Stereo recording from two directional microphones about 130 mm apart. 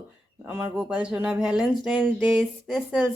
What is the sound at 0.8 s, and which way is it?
Speech, 5° right (ahead or behind).